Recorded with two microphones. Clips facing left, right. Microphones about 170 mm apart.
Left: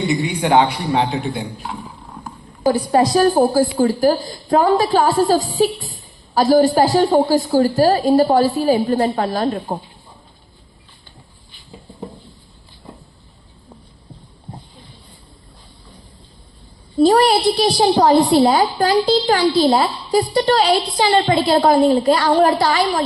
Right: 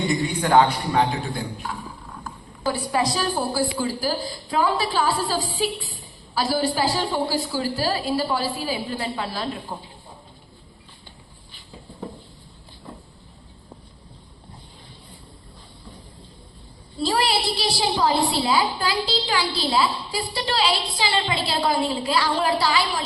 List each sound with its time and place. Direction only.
0.1 s a man's voice: 20° left (ahead or behind)
2.6 s a woman's voice: 45° left (ahead or behind)
17.0 s a woman's voice: 50° left (ahead or behind)